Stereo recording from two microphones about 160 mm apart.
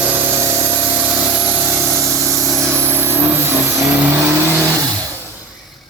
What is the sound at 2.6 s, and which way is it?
Vehicle, 15° right (ahead or behind).